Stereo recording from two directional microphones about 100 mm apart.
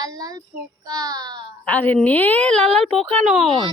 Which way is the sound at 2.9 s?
Centre (ahead or behind).